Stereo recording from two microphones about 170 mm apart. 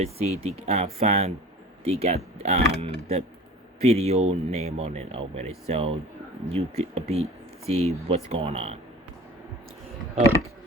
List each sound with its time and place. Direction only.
0.0 s speech: 40° right (ahead or behind)